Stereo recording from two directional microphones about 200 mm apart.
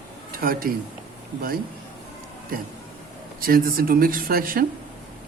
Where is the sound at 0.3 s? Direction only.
45° right (ahead or behind).